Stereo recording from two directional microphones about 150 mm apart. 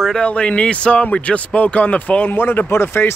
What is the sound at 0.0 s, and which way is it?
Speech, 5° left (ahead or behind).